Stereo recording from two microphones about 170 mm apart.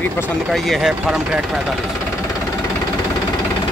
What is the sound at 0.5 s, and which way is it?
Speech, centre (ahead or behind).